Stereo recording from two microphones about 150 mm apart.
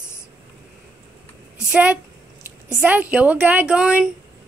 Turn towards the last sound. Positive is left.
turn(degrees=-5)  # may be behind; listen again after turning